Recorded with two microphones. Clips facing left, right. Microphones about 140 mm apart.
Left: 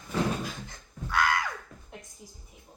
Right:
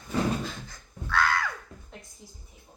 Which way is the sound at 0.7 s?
15° left (ahead or behind).